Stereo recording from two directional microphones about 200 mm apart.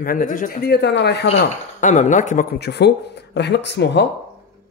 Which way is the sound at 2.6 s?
55° left (ahead or behind).